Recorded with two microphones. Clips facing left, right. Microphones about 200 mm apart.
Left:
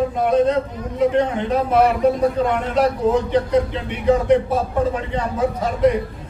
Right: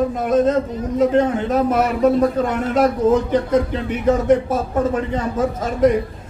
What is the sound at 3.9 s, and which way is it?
Speech, 45° right (ahead or behind).